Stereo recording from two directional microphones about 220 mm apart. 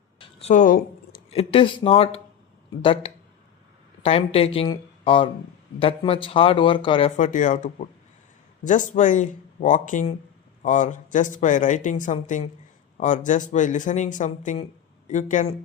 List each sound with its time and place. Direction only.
0.2 s speech: 30° left (ahead or behind)
7.2 s speech: 35° left (ahead or behind)